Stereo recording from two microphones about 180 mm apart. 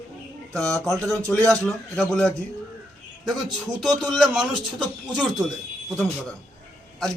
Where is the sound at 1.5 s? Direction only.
5° left (ahead or behind).